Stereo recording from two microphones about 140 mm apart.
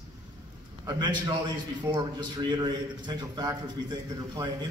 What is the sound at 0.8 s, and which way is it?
A man's voice, 30° right (ahead or behind).